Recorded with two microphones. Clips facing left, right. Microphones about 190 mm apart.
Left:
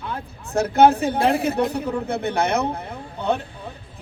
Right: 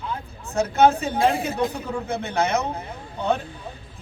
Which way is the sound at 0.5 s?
65° left (ahead or behind).